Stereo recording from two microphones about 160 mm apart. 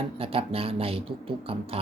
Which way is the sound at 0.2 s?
35° right (ahead or behind).